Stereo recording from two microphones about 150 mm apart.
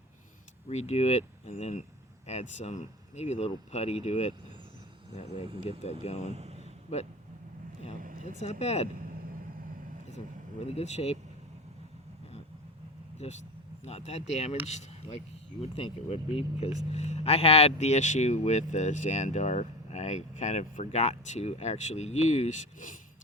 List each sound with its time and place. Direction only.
0.7 s speech: 45° left (ahead or behind)
8.4 s speech: 45° left (ahead or behind)
10.6 s speech: 45° left (ahead or behind)
13.2 s speech: 45° left (ahead or behind)